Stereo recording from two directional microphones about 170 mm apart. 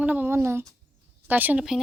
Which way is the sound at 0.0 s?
10° right (ahead or behind).